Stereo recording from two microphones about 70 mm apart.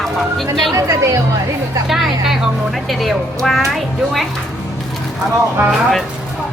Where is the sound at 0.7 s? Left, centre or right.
Right.